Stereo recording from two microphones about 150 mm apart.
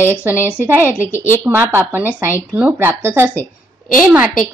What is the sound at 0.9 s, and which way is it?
Speech, 15° left (ahead or behind).